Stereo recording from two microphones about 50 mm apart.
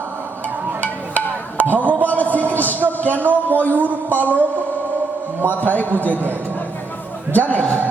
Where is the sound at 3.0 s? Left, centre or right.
Left.